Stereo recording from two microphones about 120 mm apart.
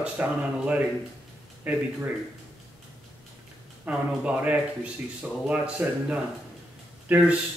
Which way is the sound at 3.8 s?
10° right (ahead or behind).